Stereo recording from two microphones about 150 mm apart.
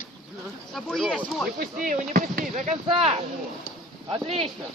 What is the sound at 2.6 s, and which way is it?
Speech, 40° right (ahead or behind).